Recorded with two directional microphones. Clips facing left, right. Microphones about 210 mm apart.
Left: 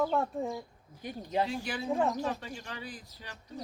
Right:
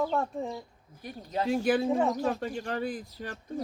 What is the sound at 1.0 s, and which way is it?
Speech, 15° left (ahead or behind).